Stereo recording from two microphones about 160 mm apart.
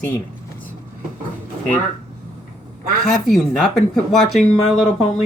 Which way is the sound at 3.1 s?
Centre (ahead or behind).